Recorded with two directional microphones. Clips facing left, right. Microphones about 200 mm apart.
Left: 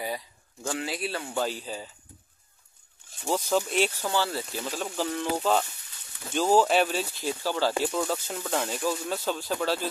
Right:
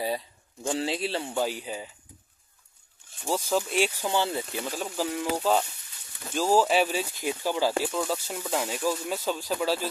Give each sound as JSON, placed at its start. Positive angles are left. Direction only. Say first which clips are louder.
{"t": 0.7, "sound": "a man's voice", "louder": "right 3 dB", "side_deg": -25}
{"t": 1.3, "sound": "speech", "louder": "right 1 dB", "side_deg": -15}
{"t": 3.3, "sound": "speech", "louder": "left 1 dB", "side_deg": -5}
{"t": 4.8, "sound": "speech", "louder": "even", "side_deg": -5}
{"t": 7.8, "sound": "speech", "louder": "left 1 dB", "side_deg": 0}